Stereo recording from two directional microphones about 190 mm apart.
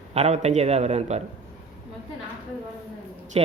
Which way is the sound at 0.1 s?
35° right (ahead or behind).